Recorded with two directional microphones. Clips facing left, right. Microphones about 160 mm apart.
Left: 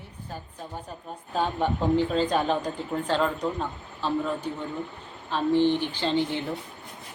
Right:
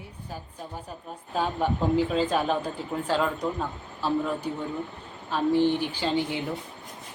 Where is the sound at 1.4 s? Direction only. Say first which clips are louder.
Even; 5° right (ahead or behind).